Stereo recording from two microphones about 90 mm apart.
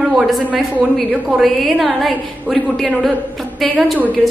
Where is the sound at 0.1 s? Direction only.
Centre (ahead or behind).